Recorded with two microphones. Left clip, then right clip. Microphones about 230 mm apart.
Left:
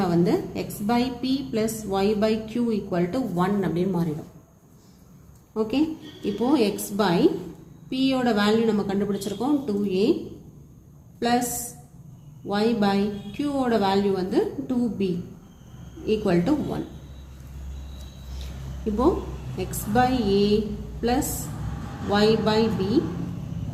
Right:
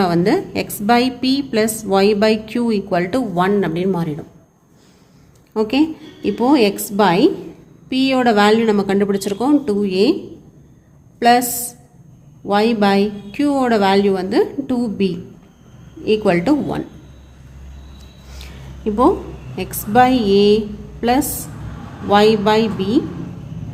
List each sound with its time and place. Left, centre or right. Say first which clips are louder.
0.0 s a woman's voice: right 7 dB; right
5.5 s a woman's voice: right 8 dB; right
11.2 s a woman's voice: right 11 dB; right
12.5 s a woman's voice: right 8 dB; right
19.5 s a woman's voice: right 9 dB; right
22.1 s a woman's voice: right 8 dB; right